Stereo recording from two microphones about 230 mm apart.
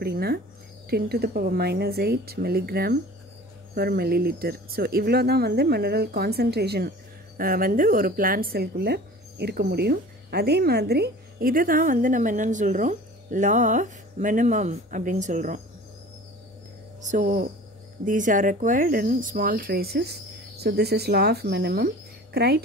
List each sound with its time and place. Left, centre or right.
0.0 s speech: right
17.0 s speech: right